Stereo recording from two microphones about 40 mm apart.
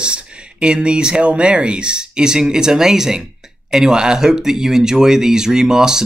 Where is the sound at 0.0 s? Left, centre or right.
Right.